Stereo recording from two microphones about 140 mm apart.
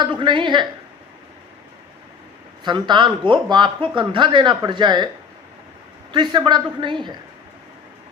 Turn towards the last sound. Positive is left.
turn(degrees=-35)  # may be behind; listen again after turning